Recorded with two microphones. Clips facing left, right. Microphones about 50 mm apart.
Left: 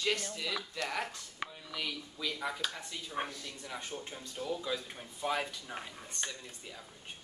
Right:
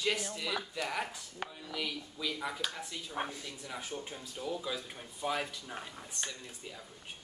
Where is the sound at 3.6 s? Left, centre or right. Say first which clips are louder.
Even; centre.